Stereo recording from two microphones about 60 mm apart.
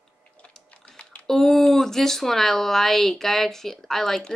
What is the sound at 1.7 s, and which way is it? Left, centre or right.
Speech, centre.